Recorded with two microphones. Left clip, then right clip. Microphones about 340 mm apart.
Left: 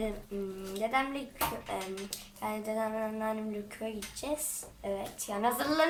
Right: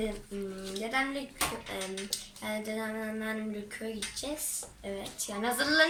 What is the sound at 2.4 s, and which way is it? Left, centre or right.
Speech, centre.